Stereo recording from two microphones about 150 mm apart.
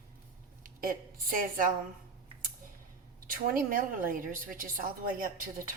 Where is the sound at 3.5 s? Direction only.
70° right (ahead or behind).